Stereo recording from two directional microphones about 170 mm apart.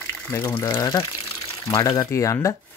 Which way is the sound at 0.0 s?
15° left (ahead or behind).